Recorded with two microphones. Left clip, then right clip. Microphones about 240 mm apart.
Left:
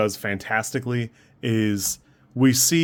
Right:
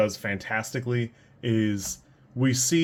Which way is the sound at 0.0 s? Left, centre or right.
Left.